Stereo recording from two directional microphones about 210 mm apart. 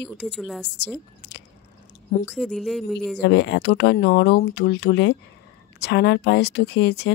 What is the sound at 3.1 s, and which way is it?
Speech, 55° left (ahead or behind).